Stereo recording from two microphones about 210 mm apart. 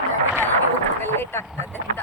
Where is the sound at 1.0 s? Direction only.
10° left (ahead or behind).